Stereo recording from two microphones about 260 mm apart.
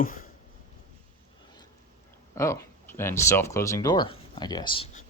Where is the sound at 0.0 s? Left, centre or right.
Left.